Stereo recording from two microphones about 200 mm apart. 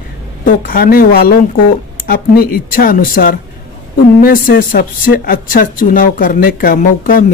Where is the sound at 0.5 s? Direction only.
45° left (ahead or behind).